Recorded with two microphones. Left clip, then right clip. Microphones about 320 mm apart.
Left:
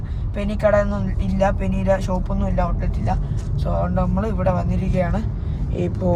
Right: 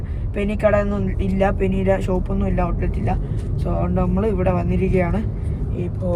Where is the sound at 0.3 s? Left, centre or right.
Left.